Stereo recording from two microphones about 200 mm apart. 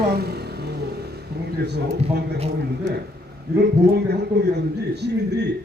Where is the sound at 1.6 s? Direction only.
55° right (ahead or behind).